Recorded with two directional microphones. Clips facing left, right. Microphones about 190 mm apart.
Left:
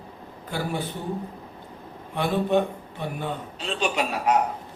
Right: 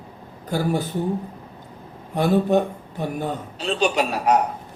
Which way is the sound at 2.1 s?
40° right (ahead or behind).